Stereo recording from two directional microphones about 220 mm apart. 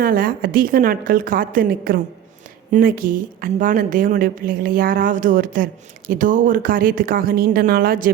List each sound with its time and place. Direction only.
0.0 s a woman's voice: 40° right (ahead or behind)